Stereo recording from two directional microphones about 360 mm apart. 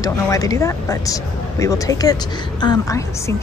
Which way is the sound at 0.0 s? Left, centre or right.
Centre.